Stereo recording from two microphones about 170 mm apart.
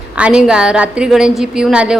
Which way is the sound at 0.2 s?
5° right (ahead or behind).